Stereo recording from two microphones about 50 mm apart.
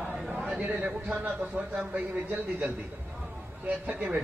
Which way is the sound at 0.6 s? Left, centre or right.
Right.